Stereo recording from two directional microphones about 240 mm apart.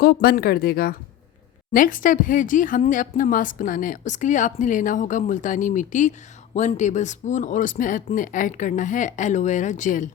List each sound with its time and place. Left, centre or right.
0.0 s a woman's voice: left